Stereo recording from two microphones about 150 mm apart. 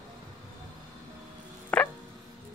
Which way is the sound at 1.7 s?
10° left (ahead or behind).